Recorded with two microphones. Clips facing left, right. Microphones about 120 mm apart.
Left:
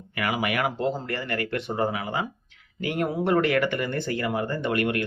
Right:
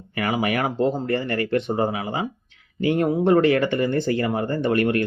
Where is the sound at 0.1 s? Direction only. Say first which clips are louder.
Right 4 dB; 35° right (ahead or behind).